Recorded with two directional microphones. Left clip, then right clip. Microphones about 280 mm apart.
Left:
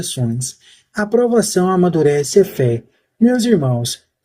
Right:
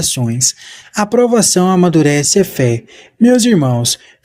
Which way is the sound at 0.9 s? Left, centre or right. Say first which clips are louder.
Right 3 dB; right.